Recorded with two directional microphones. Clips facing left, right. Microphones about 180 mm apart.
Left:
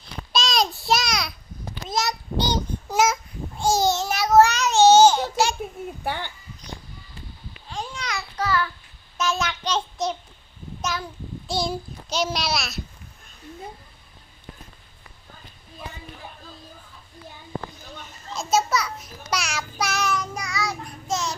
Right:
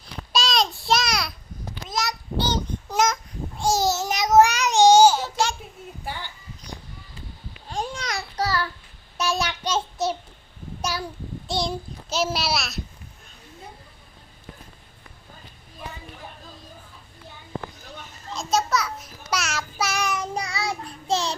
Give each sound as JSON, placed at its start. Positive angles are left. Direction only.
{"t": 0.3, "sound": "child singing", "side_deg": 0}
{"t": 1.9, "sound": "child singing", "side_deg": 25}
{"t": 2.9, "sound": "babbling", "side_deg": 5}
{"t": 4.0, "sound": "child singing", "side_deg": -20}
{"t": 6.1, "sound": "a child's voice", "side_deg": 60}
{"t": 7.7, "sound": "babbling", "side_deg": -45}
{"t": 9.2, "sound": "child singing", "side_deg": -35}
{"t": 9.6, "sound": "child singing", "side_deg": -5}
{"t": 11.4, "sound": "a child's voice", "side_deg": 0}
{"t": 18.3, "sound": "a sound", "side_deg": 0}
{"t": 20.1, "sound": "child singing", "side_deg": -30}